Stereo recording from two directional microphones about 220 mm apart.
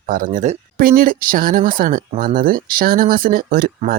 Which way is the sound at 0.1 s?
35° right (ahead or behind).